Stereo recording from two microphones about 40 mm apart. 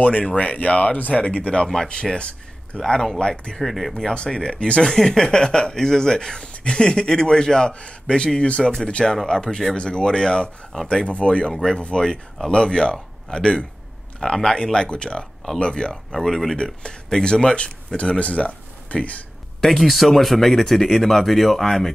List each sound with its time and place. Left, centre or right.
0.2 s speech: left
2.8 s a man's voice: centre
3.6 s speech: centre
3.9 s a man's voice: left
4.8 s a man's voice: centre
11.1 s a man's voice: left
16.1 s speech: centre
16.5 s a man's voice: left
19.6 s speech: centre